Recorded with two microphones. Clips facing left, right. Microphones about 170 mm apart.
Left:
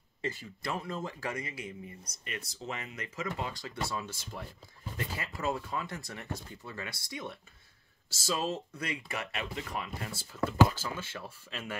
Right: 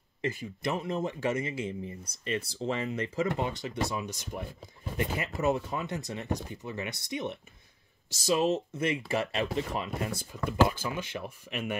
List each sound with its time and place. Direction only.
0.3 s speech: 20° right (ahead or behind)